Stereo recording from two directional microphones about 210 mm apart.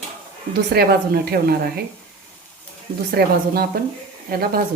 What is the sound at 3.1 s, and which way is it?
A woman's voice, 45° right (ahead or behind).